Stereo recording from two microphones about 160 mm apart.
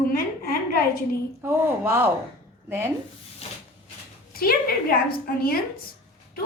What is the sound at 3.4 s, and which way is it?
Wood, 40° left (ahead or behind).